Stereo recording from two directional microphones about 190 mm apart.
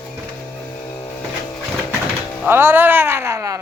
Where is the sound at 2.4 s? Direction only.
10° right (ahead or behind).